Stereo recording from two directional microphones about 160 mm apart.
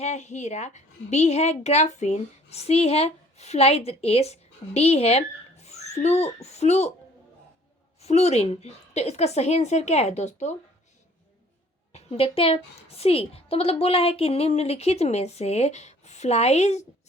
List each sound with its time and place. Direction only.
0.0 s a woman's voice: 45° left (ahead or behind)
8.0 s a woman's voice: 40° left (ahead or behind)
11.9 s a woman's voice: 40° left (ahead or behind)